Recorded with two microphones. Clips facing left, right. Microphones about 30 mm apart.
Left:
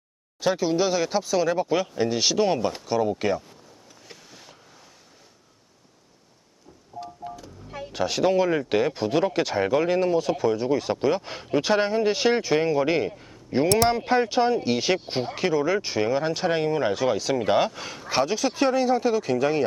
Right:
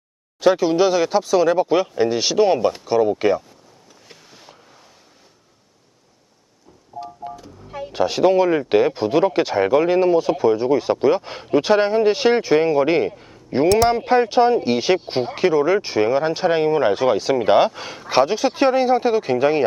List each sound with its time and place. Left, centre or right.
0.3 s speech: centre
4.1 s a sound: centre
7.0 s speech: centre
17.7 s speech: centre